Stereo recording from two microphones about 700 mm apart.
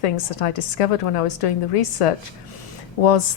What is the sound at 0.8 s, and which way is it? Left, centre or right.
A woman's voice, left.